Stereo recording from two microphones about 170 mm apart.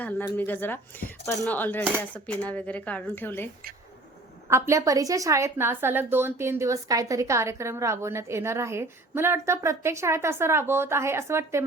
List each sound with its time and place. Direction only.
0.3 s speech: 10° left (ahead or behind)
4.4 s a woman's voice: 15° right (ahead or behind)